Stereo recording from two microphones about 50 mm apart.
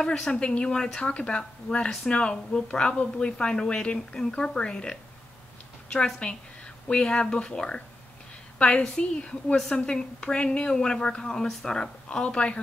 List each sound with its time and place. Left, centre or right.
0.0 s a woman's voice: centre